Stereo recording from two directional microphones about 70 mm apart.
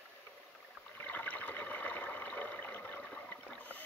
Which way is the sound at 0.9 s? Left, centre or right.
Left.